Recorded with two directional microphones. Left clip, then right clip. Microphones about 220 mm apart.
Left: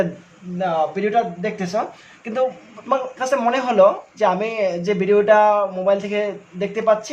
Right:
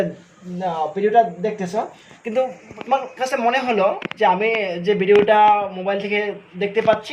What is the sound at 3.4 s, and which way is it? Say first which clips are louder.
Speech: left 3 dB; 25° left (ahead or behind).